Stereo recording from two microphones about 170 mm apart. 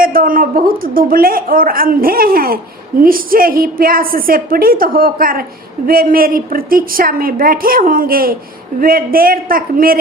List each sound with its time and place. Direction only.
0.0 s a woman's voice: 55° right (ahead or behind)